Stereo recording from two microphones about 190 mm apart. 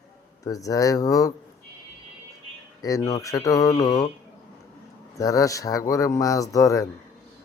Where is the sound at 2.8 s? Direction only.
20° left (ahead or behind).